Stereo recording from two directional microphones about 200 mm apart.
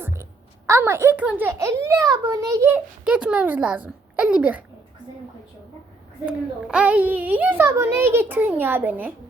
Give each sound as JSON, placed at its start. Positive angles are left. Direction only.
{"t": 0.0, "sound": "a sound", "side_deg": -15}
{"t": 0.7, "sound": "a child's voice", "side_deg": -15}
{"t": 6.2, "sound": "a child's voice", "side_deg": -5}